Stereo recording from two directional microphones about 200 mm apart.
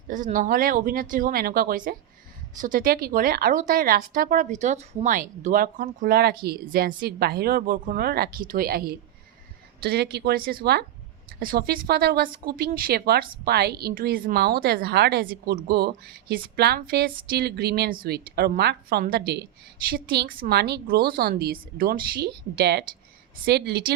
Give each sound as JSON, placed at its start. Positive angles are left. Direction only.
{"t": 0.1, "sound": "speech", "side_deg": -40}